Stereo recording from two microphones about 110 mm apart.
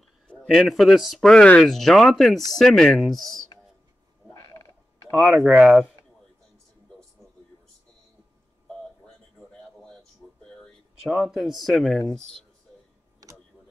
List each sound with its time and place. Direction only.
0.3 s speech: 5° left (ahead or behind)
4.3 s frog: 30° left (ahead or behind)
5.1 s speech: 5° right (ahead or behind)
8.6 s a sound: 5° left (ahead or behind)
11.1 s speech: 5° right (ahead or behind)